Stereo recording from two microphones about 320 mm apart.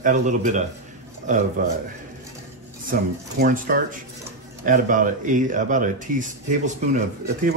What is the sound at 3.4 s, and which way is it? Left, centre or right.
Speech, right.